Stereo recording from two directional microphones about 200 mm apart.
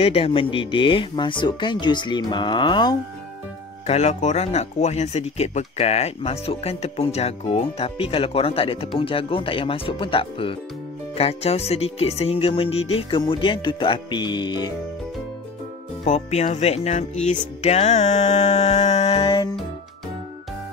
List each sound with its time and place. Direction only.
0.0 s music: 30° left (ahead or behind)
3.8 s speech: 35° left (ahead or behind)
11.1 s music: 30° left (ahead or behind)
16.0 s speech: 35° left (ahead or behind)